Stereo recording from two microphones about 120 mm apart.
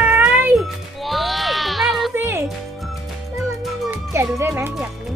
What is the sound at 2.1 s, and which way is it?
Music, 20° right (ahead or behind).